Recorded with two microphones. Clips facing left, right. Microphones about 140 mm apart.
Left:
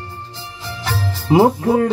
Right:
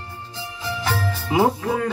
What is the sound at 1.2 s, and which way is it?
Music, 35° left (ahead or behind).